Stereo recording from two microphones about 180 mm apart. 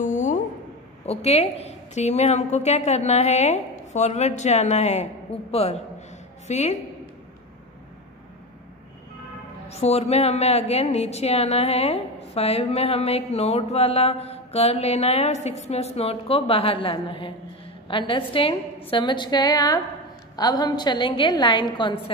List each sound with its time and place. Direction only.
0.0 s a sound: 45° left (ahead or behind)
1.0 s a woman's voice: 35° left (ahead or behind)
9.7 s a woman's voice: 35° left (ahead or behind)